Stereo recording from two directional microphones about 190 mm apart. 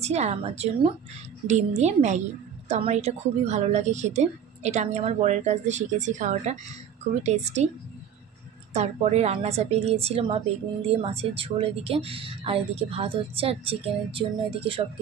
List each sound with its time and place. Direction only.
0.0 s a woman's voice: 35° right (ahead or behind)
8.7 s a woman's voice: 35° right (ahead or behind)